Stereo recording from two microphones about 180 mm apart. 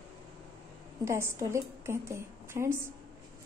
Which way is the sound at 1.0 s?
15° right (ahead or behind).